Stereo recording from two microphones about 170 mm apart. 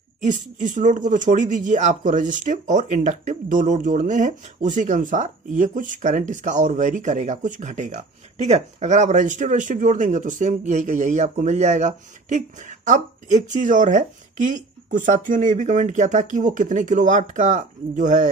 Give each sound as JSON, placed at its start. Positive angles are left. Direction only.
{"t": 0.2, "sound": "speech", "side_deg": -45}